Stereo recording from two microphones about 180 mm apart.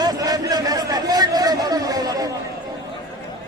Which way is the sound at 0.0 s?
20° right (ahead or behind).